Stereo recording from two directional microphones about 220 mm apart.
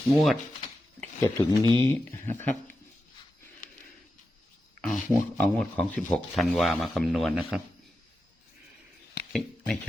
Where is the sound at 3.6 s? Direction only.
35° left (ahead or behind).